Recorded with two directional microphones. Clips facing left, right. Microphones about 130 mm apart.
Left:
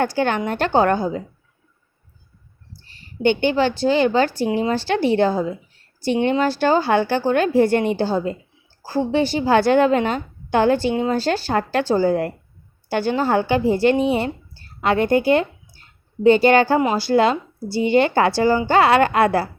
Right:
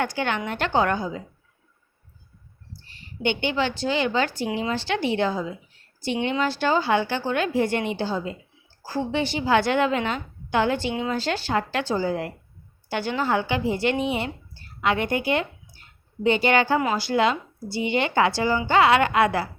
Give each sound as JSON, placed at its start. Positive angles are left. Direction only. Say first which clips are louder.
{"t": 0.0, "sound": "a woman's voice", "louder": "left 6 dB", "side_deg": 40}
{"t": 2.8, "sound": "a woman's voice", "louder": "left 8 dB", "side_deg": 35}
{"t": 8.8, "sound": "a woman's voice", "louder": "left 6 dB", "side_deg": 30}